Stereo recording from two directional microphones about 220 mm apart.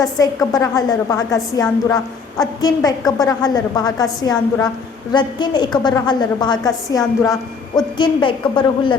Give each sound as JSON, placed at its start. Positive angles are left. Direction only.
{"t": 0.0, "sound": "a woman's voice", "side_deg": 15}